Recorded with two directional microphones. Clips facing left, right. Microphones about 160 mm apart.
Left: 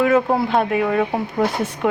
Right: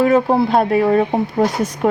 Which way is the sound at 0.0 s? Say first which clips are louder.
Right 3 dB; 35° right (ahead or behind).